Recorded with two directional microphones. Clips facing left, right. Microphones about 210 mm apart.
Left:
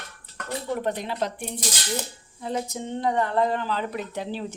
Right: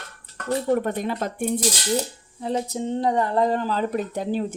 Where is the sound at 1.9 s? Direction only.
35° right (ahead or behind).